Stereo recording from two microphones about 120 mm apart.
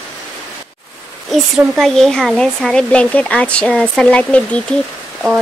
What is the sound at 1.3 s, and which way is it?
Speech, centre (ahead or behind).